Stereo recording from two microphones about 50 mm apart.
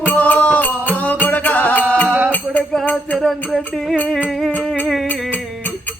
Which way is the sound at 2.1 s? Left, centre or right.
Right.